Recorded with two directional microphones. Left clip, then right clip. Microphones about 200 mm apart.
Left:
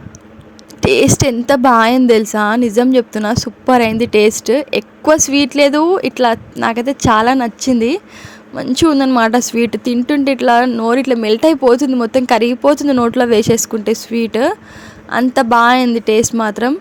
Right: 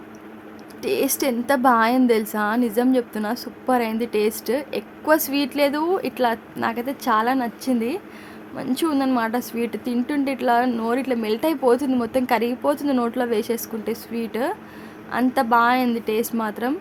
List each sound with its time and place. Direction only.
0.8 s a woman's voice: 35° left (ahead or behind)